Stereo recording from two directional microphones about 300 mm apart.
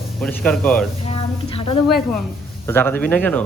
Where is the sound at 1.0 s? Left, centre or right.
Centre.